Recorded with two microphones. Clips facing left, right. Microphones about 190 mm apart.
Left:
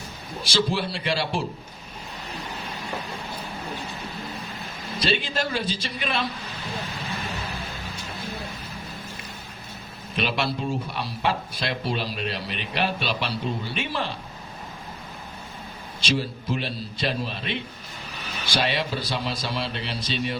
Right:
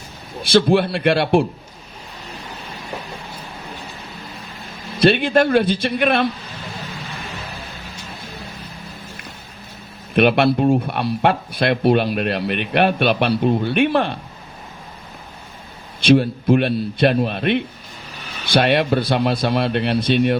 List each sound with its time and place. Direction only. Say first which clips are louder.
0.4 s speech: right 10 dB; 60° right (ahead or behind)
4.9 s speech: right 11 dB; 60° right (ahead or behind)
10.2 s speech: right 12 dB; 60° right (ahead or behind)
16.0 s speech: right 13 dB; 60° right (ahead or behind)